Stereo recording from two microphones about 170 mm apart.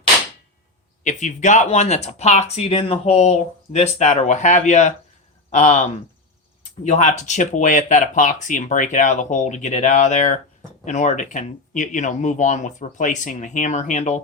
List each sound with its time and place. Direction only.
1.0 s speech: 45° left (ahead or behind)
6.8 s speech: 45° left (ahead or behind)